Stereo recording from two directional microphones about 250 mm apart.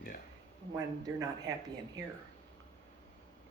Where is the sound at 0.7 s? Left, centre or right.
Centre.